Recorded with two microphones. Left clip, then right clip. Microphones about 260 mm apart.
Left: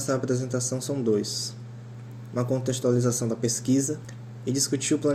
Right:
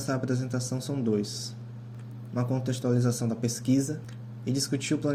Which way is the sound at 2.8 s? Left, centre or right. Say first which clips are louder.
Left 4 dB; right.